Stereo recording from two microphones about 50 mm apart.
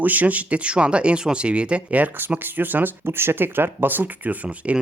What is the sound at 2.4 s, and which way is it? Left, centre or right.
Speech, right.